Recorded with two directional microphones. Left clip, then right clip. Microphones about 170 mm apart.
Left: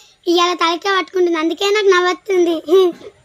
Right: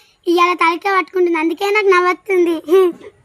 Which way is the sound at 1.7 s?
35° right (ahead or behind).